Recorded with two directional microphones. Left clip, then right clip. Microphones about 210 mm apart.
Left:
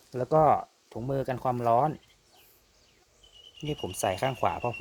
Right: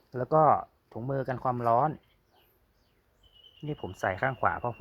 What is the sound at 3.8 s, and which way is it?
Speech, 5° left (ahead or behind).